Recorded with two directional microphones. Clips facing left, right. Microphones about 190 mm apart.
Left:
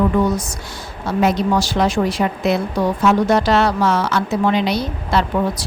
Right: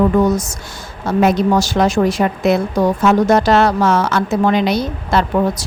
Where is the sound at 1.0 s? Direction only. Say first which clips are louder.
Right 3 dB; 50° right (ahead or behind).